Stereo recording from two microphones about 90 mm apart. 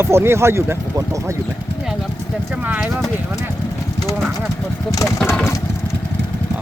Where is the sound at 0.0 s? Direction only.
25° right (ahead or behind).